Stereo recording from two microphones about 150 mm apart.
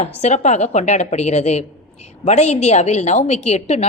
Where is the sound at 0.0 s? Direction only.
50° left (ahead or behind).